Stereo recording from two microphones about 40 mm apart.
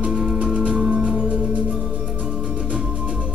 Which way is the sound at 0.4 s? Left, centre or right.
Right.